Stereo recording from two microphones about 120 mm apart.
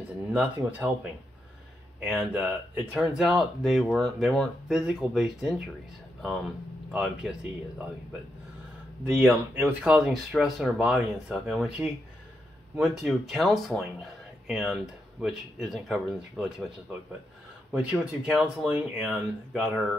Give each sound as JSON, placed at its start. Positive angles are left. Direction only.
{"t": 0.3, "sound": "speech", "side_deg": -10}
{"t": 9.3, "sound": "speech", "side_deg": -5}
{"t": 17.7, "sound": "speech", "side_deg": -5}